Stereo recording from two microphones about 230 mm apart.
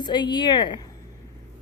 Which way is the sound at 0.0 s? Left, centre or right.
Centre.